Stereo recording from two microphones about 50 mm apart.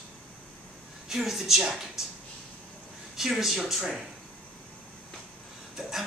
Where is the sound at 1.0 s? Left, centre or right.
Centre.